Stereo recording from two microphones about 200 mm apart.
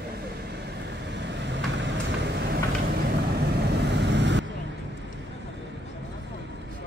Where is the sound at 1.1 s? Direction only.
60° right (ahead or behind).